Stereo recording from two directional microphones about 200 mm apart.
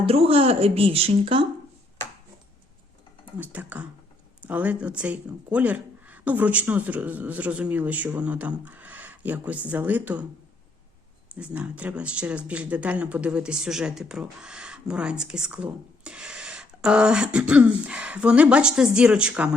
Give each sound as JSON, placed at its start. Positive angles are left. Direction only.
{"t": 0.0, "sound": "speech", "side_deg": -30}
{"t": 3.3, "sound": "speech", "side_deg": -10}
{"t": 11.3, "sound": "speech", "side_deg": -5}